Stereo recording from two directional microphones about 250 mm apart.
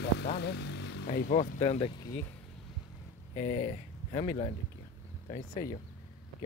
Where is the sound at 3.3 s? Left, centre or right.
Left.